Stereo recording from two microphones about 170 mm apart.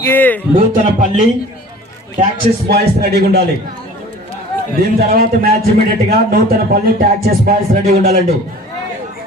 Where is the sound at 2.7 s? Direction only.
70° right (ahead or behind).